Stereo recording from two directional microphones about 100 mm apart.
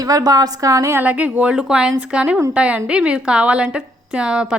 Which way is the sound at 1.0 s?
15° right (ahead or behind).